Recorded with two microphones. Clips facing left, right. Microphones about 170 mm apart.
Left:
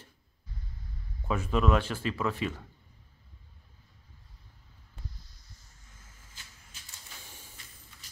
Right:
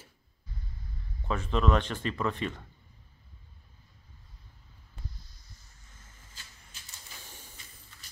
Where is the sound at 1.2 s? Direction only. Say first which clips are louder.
Left 1 dB; 10° left (ahead or behind).